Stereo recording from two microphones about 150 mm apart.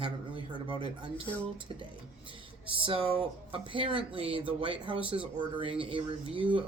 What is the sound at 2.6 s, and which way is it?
A man's voice, 35° right (ahead or behind).